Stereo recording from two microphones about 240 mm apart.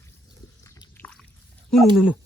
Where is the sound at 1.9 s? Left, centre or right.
Centre.